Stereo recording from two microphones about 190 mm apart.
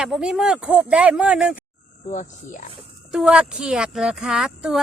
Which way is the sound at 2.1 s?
40° left (ahead or behind).